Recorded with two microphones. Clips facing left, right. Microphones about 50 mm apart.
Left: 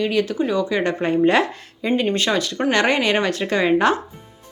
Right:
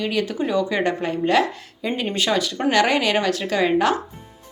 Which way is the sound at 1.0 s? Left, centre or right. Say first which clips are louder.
Left 5 dB; centre.